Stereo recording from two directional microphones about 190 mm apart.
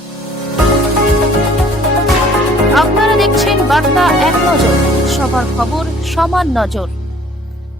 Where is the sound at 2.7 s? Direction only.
Centre (ahead or behind).